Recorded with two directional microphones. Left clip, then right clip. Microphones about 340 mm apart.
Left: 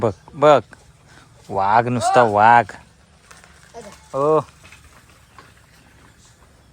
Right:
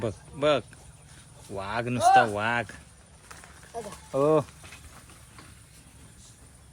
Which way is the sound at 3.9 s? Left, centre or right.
Centre.